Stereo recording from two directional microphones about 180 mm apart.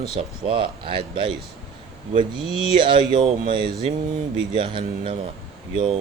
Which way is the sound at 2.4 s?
35° left (ahead or behind).